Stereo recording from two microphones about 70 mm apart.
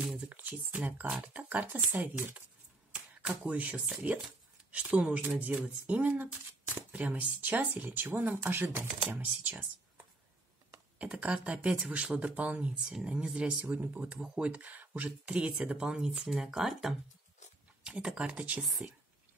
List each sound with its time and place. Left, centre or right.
0.3 s speech: right
11.0 s speech: centre
13.7 s speech: right